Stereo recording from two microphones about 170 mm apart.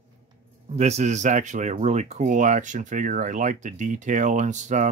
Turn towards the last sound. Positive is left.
turn(degrees=-45)  # may be behind; listen again after turning